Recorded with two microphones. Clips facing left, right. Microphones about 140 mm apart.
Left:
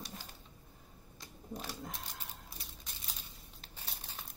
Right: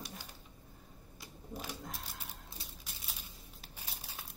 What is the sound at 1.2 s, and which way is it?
Typewriter, 5° right (ahead or behind).